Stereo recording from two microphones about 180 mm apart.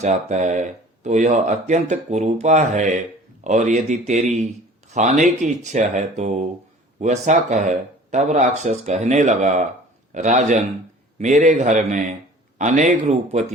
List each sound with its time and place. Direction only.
0.0 s a man's voice: 40° right (ahead or behind)